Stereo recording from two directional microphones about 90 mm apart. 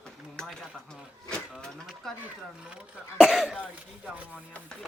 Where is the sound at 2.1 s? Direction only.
5° left (ahead or behind).